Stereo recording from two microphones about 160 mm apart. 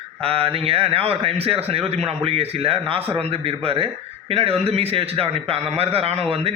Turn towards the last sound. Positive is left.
turn(degrees=-40)  # may be behind; listen again after turning